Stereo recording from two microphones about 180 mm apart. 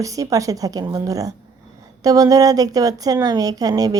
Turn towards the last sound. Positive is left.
turn(degrees=-20)  # may be behind; listen again after turning